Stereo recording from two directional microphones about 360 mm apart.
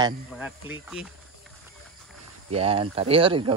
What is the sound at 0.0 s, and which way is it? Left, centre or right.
Speech, centre.